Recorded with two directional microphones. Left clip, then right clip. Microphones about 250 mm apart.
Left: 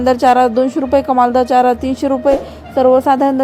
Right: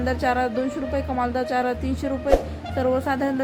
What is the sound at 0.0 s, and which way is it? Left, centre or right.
A woman's voice, left.